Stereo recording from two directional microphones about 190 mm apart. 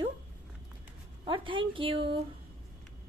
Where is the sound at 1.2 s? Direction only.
25° right (ahead or behind).